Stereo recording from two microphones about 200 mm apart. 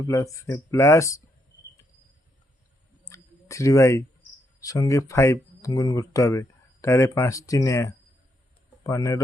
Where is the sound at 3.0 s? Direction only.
15° left (ahead or behind).